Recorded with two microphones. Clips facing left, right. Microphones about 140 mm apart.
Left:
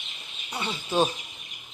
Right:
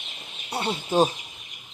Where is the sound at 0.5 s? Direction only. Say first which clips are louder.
Right 4 dB; 35° right (ahead or behind).